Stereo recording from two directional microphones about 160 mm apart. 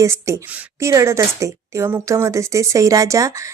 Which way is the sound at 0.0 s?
20° right (ahead or behind).